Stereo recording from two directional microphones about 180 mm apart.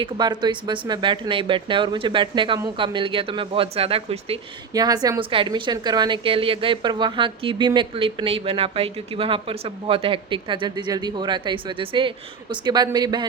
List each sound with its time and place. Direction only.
0.0 s speech: 25° right (ahead or behind)
4.7 s speech: 20° right (ahead or behind)